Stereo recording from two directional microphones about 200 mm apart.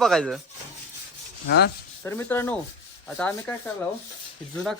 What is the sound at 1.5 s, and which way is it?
Speech, 55° left (ahead or behind).